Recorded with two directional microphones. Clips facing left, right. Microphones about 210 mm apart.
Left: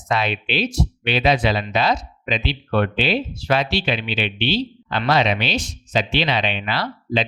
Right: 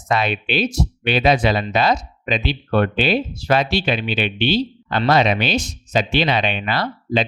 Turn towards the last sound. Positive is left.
turn(degrees=-50)  # may be behind; listen again after turning